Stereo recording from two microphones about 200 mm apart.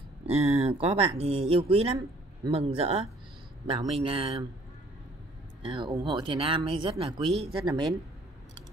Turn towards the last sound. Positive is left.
turn(degrees=-25)  # may be behind; listen again after turning